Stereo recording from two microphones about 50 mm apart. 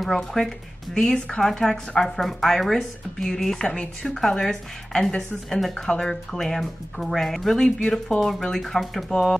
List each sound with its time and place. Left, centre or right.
0.0 s speech: centre
3.6 s speech: centre